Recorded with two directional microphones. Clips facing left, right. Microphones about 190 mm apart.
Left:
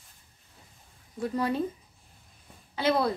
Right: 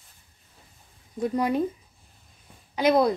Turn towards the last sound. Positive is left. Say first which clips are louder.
# right 5 dB
turn(degrees=-15)  # may be behind; listen again after turning